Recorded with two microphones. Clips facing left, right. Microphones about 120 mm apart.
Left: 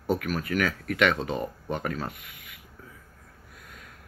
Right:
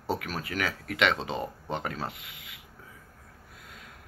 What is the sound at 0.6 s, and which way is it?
Speech, 20° right (ahead or behind).